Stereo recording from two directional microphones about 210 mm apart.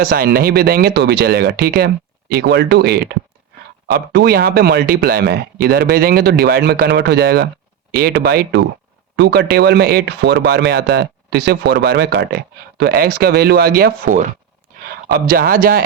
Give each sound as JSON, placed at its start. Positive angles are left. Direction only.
{"t": 0.0, "sound": "speech", "side_deg": -45}